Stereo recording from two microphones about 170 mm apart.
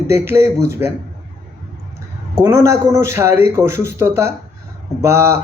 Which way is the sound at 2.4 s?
15° right (ahead or behind).